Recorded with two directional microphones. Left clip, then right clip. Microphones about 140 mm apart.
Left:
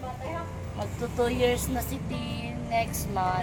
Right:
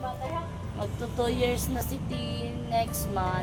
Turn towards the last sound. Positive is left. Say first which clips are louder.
# left 2 dB
turn(degrees=-10)  # may be behind; listen again after turning